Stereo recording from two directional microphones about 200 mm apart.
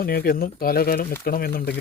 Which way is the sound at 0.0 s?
50° left (ahead or behind).